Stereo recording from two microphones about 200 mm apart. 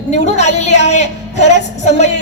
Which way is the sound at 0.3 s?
35° left (ahead or behind).